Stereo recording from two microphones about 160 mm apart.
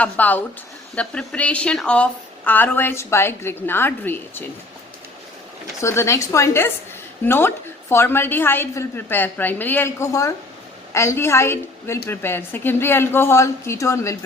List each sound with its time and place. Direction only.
0.0 s a woman's voice: 10° left (ahead or behind)
5.8 s a woman's voice: 15° left (ahead or behind)